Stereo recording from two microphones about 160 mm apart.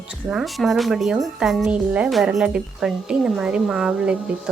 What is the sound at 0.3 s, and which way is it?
Speech, centre (ahead or behind).